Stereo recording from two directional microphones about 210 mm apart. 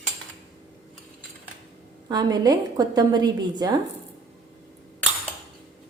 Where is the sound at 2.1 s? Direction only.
20° right (ahead or behind).